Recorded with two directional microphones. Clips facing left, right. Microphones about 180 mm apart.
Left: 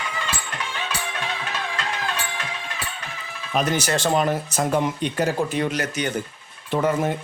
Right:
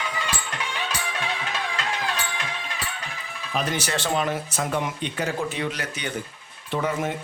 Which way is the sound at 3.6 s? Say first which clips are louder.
Left 5 dB; 40° left (ahead or behind).